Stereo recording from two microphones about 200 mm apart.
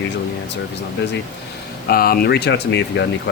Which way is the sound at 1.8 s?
50° left (ahead or behind).